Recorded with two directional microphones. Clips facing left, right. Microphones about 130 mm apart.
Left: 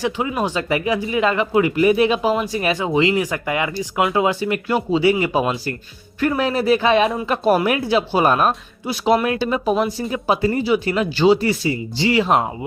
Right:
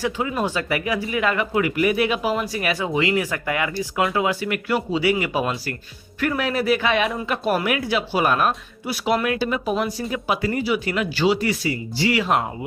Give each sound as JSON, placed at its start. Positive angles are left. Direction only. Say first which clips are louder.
{"t": 0.0, "sound": "speech", "louder": "left 2 dB", "side_deg": 20}